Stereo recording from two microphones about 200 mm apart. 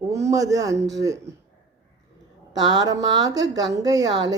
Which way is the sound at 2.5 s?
20° right (ahead or behind).